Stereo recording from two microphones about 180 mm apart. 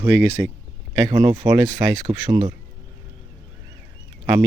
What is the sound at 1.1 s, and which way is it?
Speech, 20° right (ahead or behind).